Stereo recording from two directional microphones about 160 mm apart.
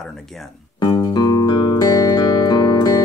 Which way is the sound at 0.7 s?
25° left (ahead or behind).